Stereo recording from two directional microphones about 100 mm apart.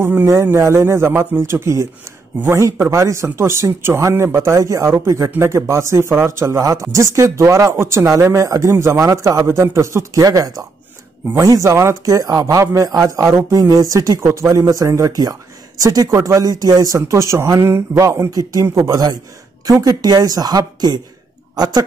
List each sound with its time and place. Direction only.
0.0 s speech: 15° right (ahead or behind)
0.3 s a man's voice: 30° right (ahead or behind)